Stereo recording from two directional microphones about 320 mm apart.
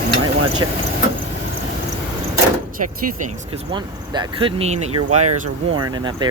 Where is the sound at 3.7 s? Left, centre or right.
Centre.